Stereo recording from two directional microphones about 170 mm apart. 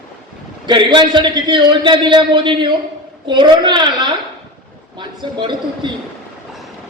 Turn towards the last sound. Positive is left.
turn(degrees=-25)  # may be behind; listen again after turning